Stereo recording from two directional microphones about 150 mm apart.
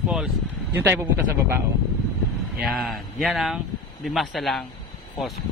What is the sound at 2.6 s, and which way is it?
Speech, centre (ahead or behind).